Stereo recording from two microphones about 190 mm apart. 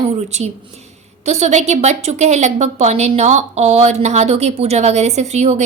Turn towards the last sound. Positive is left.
turn(degrees=-35)  # may be behind; listen again after turning